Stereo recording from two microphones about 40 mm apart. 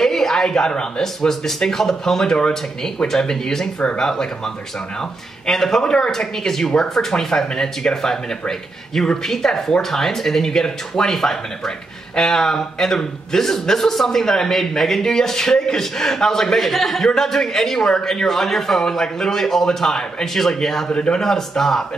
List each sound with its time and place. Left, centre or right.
0.0 s a sound: centre
1.0 s a man's voice: centre
5.5 s a man's voice: centre
20.9 s speech: left
21.2 s a man's voice: centre